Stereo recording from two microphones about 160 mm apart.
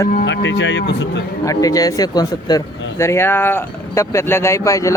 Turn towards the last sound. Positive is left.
turn(degrees=20)  # may be behind; listen again after turning